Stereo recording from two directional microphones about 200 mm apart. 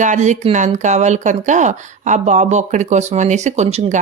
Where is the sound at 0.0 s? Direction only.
35° right (ahead or behind).